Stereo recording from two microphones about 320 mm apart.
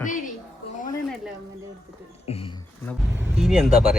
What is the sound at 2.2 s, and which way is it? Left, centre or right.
Speech, centre.